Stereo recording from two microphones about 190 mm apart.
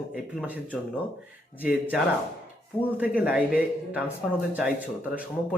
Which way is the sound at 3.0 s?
10° right (ahead or behind).